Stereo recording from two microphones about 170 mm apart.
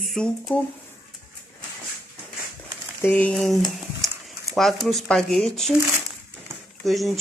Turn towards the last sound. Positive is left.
turn(degrees=0)  # may be behind; listen again after turning